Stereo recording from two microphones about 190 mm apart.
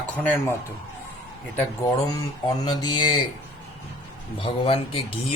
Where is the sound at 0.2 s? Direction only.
10° left (ahead or behind).